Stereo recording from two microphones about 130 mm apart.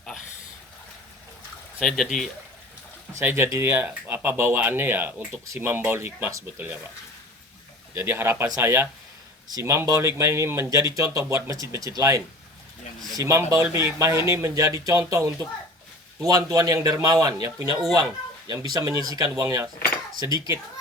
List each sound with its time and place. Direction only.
1.8 s speech: centre (ahead or behind)
3.2 s speech: 15° right (ahead or behind)
7.9 s speech: 20° right (ahead or behind)